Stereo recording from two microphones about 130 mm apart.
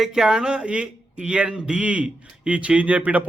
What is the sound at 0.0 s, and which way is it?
Speech, 5° right (ahead or behind).